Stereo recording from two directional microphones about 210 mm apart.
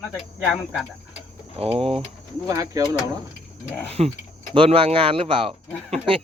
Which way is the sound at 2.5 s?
15° right (ahead or behind).